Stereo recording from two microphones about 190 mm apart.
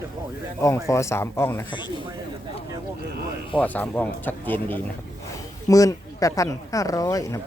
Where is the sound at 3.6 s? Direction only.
10° left (ahead or behind).